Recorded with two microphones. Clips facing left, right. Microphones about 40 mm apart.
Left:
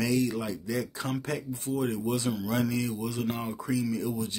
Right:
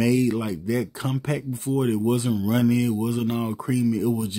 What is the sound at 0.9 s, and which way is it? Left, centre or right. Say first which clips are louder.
Speech: right 4 dB; centre.